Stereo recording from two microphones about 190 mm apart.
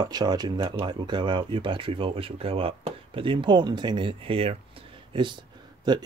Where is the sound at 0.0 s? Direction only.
20° right (ahead or behind).